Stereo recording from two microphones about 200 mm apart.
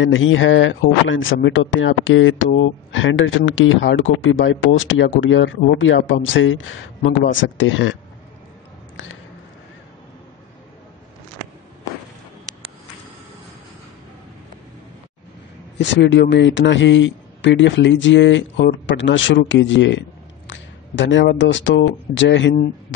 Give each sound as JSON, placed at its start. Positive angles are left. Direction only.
{"t": 0.0, "sound": "speech", "side_deg": 75}
{"t": 8.9, "sound": "a sound", "side_deg": 75}
{"t": 15.8, "sound": "a man's voice", "side_deg": 60}